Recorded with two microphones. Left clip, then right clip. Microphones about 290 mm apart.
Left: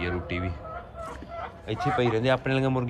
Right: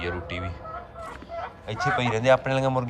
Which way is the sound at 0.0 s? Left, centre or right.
Centre.